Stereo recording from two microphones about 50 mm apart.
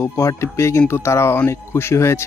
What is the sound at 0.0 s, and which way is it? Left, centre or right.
Speech, left.